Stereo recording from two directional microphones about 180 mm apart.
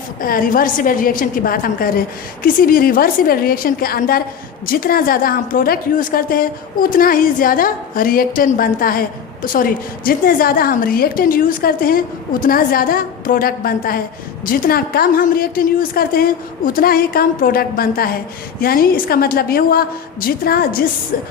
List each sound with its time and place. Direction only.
0.2 s a woman's voice: 50° left (ahead or behind)